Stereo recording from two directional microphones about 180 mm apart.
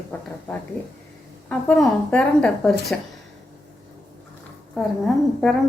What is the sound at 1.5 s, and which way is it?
A woman's voice, 5° left (ahead or behind).